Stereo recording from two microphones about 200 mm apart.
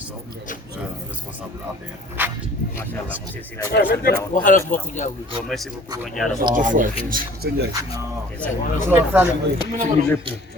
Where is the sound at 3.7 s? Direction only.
50° left (ahead or behind).